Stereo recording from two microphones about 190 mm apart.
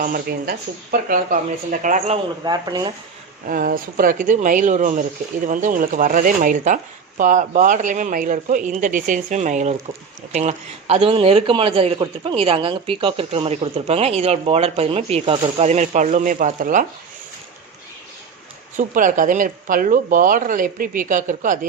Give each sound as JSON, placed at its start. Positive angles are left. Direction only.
{"t": 0.0, "sound": "speech", "side_deg": -50}
{"t": 2.4, "sound": "speech", "side_deg": -20}
{"t": 3.4, "sound": "a man's voice", "side_deg": -45}
{"t": 18.8, "sound": "speech", "side_deg": -45}